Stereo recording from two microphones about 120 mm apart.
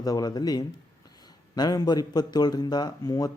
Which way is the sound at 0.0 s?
30° left (ahead or behind).